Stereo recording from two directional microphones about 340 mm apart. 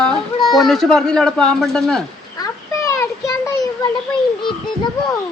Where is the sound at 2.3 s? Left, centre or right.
Centre.